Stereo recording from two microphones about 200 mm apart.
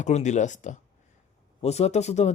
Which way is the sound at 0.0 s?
35° left (ahead or behind).